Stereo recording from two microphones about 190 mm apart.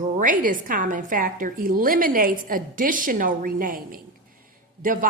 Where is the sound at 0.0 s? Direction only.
45° right (ahead or behind).